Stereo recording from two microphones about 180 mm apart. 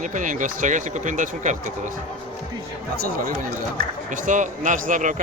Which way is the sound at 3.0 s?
55° right (ahead or behind).